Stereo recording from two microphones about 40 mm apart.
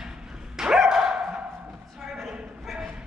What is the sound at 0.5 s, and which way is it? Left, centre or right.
Dog, centre.